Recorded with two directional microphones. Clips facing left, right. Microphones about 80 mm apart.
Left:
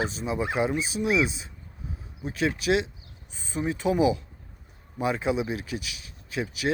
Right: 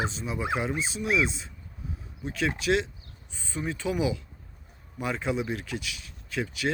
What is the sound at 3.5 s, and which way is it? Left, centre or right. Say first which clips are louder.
Speech: left 4 dB; left.